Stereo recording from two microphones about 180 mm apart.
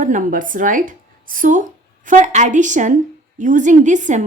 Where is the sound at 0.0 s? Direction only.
45° right (ahead or behind).